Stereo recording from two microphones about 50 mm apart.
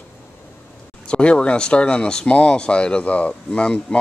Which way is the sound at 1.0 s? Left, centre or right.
Left.